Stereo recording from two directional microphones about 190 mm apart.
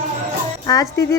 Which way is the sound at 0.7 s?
20° left (ahead or behind).